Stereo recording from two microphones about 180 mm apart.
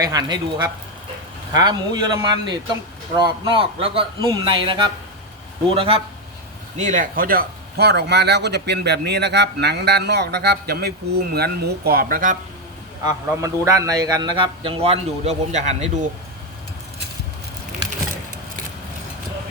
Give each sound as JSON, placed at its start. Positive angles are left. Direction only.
{"t": 0.0, "sound": "a man's voice", "side_deg": -20}
{"t": 6.7, "sound": "speech", "side_deg": -45}
{"t": 13.1, "sound": "a man's voice", "side_deg": -20}